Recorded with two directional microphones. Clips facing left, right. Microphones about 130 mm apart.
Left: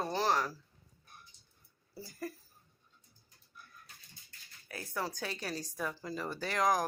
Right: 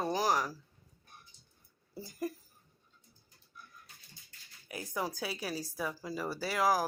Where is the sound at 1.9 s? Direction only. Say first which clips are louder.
Right 4 dB; 20° right (ahead or behind).